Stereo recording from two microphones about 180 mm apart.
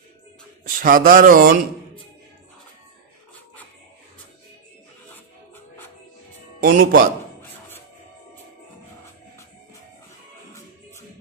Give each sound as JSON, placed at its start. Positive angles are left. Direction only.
{"t": 0.7, "sound": "speech", "side_deg": -50}
{"t": 6.6, "sound": "speech", "side_deg": -55}